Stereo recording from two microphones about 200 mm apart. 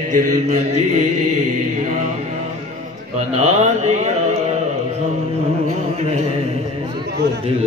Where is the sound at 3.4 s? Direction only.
35° right (ahead or behind).